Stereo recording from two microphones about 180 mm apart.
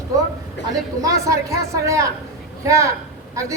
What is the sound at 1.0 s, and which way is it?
A woman's voice, 20° right (ahead or behind).